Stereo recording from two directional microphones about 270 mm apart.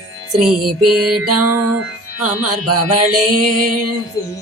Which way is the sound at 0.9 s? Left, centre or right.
Centre.